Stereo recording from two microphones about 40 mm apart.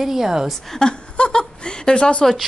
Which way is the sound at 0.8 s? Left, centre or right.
Left.